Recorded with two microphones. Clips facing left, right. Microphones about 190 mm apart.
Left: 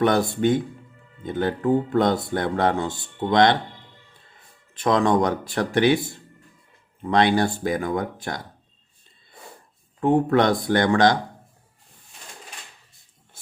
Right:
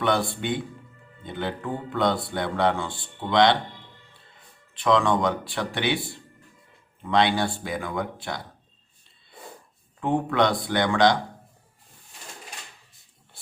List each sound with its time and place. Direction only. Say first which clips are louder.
0.0 s speech: left 5 dB; 45° left (ahead or behind)
4.7 s speech: left 2 dB; 45° left (ahead or behind)
10.0 s speech: left 4 dB; 45° left (ahead or behind)